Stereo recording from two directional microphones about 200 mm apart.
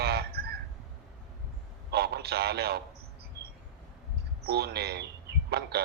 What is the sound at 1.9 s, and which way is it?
Speech, 55° right (ahead or behind).